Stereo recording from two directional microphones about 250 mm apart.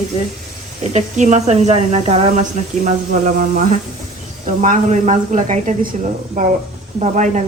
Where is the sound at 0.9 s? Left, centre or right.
Right.